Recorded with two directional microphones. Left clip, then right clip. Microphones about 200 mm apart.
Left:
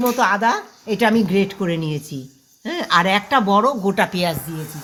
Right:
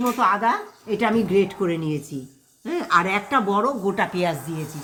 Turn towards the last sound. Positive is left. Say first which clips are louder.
# left 2 dB
turn(degrees=15)  # may be behind; listen again after turning